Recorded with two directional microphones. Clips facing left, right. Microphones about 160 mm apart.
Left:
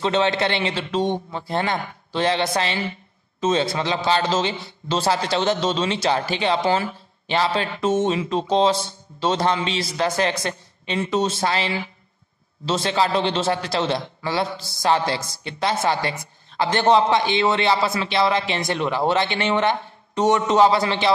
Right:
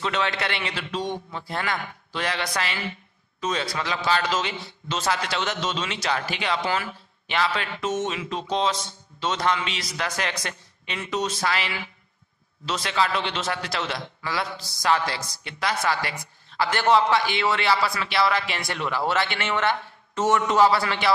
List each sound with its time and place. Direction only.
0.0 s a man's voice: 30° left (ahead or behind)